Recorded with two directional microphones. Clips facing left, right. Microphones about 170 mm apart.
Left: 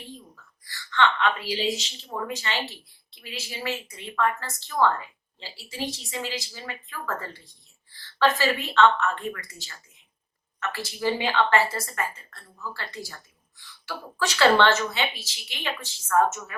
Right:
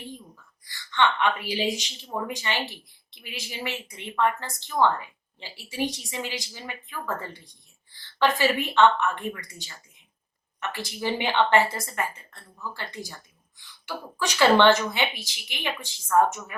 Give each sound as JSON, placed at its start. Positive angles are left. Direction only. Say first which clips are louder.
{"t": 0.7, "sound": "a woman's voice", "louder": "even", "side_deg": -15}
{"t": 8.2, "sound": "speech", "louder": "even", "side_deg": -15}